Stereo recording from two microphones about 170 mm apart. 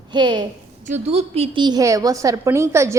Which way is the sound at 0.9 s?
40° right (ahead or behind).